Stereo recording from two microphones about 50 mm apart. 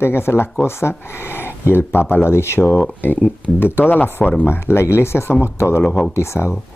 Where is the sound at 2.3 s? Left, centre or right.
Left.